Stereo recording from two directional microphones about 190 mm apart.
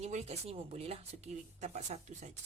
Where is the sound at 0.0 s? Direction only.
35° right (ahead or behind).